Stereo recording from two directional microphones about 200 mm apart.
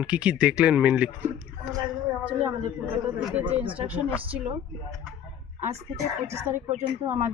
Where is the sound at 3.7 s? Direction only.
25° right (ahead or behind).